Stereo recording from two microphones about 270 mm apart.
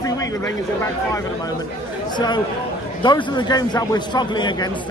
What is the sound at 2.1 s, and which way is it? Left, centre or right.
A man's voice, centre.